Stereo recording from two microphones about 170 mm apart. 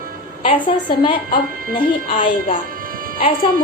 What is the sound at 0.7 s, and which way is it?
Speech, 30° left (ahead or behind).